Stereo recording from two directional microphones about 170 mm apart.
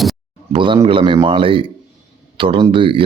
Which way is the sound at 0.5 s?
30° right (ahead or behind).